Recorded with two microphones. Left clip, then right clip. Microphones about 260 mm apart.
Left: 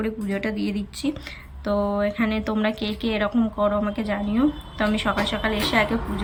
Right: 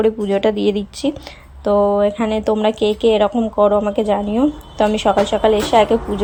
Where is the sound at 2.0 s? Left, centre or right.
Centre.